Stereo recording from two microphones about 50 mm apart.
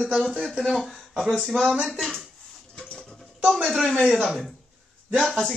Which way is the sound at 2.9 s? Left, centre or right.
Centre.